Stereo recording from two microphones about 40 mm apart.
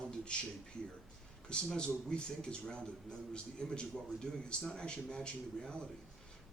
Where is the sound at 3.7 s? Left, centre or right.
Left.